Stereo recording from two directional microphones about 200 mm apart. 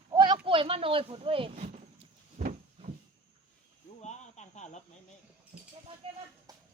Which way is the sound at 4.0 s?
35° left (ahead or behind).